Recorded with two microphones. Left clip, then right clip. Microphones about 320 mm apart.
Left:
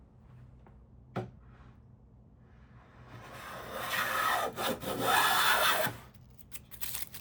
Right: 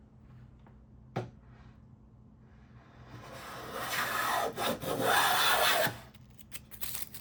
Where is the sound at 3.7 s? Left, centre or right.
Centre.